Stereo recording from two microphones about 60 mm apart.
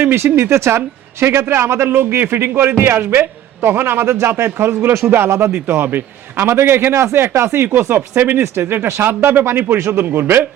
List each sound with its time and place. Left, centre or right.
0.0 s a man's voice: right